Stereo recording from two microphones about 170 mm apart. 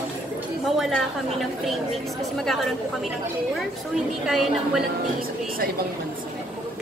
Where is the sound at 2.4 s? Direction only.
Centre (ahead or behind).